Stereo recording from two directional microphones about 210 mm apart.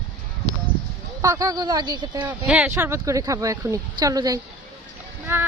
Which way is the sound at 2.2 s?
5° right (ahead or behind).